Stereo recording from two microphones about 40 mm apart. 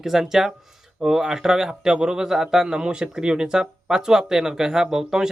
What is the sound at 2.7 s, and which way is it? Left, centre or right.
Speech, right.